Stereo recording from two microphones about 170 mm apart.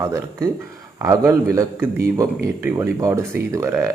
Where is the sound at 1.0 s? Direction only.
20° right (ahead or behind).